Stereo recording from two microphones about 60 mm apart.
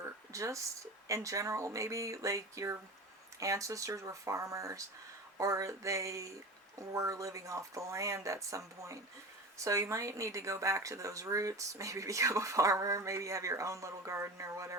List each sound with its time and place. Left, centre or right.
0.3 s speech: right